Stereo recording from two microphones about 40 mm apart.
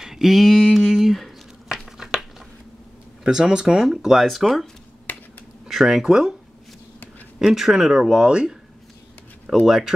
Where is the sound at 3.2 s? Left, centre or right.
Centre.